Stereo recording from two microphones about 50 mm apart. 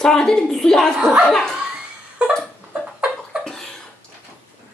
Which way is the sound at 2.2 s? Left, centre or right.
Right.